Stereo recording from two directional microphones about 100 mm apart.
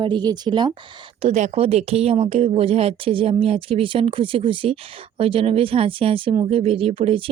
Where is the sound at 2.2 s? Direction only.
75° right (ahead or behind).